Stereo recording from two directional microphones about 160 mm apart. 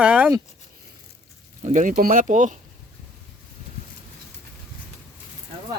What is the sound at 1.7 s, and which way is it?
Speech, 55° right (ahead or behind).